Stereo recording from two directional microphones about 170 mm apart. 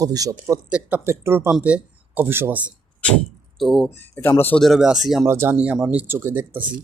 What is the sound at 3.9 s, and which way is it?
Speech, 10° left (ahead or behind).